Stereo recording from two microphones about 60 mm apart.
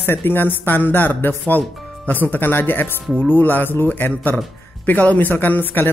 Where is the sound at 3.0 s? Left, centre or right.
Centre.